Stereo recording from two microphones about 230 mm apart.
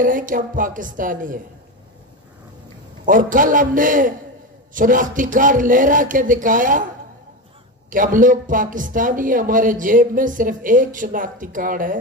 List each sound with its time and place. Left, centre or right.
0.0 s speech: right
3.1 s speech: right
7.9 s speech: right